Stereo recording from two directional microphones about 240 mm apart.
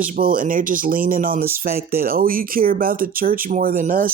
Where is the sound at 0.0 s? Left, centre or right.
Right.